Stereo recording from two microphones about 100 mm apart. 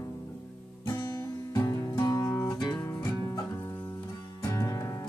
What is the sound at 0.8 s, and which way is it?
Music, 35° left (ahead or behind).